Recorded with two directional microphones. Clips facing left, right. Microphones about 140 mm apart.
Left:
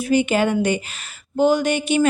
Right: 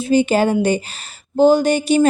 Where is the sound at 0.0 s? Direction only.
30° right (ahead or behind).